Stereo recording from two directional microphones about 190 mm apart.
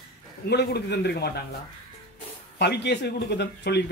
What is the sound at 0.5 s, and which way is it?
Speech, 60° left (ahead or behind).